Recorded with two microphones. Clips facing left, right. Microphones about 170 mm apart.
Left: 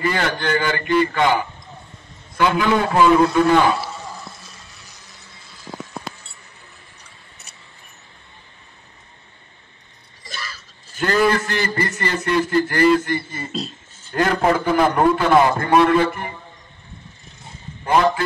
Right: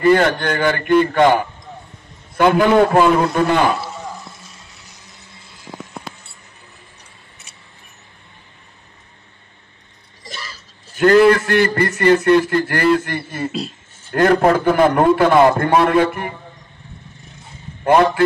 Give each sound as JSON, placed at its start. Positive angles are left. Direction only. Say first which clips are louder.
{"t": 0.0, "sound": "a man's voice", "louder": "right 8 dB", "side_deg": -50}
{"t": 10.2, "sound": "a sound", "louder": "right 1 dB", "side_deg": -15}
{"t": 11.0, "sound": "a man's voice", "louder": "right 7 dB", "side_deg": -60}
{"t": 13.5, "sound": "speech", "louder": "right 2 dB", "side_deg": -10}
{"t": 14.1, "sound": "a man's voice", "louder": "right 5 dB", "side_deg": -55}
{"t": 17.8, "sound": "a man's voice", "louder": "right 4 dB", "side_deg": -60}